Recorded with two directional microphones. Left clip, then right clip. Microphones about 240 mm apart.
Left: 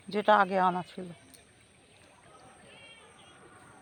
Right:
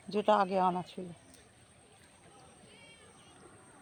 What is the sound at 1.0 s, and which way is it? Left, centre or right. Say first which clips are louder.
Speech: left 2 dB; centre.